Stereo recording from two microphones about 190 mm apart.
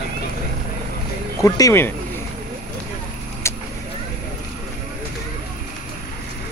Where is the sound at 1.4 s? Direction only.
15° left (ahead or behind).